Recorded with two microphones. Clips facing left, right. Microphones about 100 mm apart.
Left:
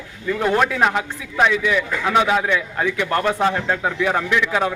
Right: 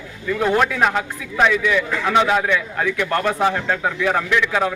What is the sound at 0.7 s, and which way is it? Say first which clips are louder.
A man's voice: even; 20° left (ahead or behind).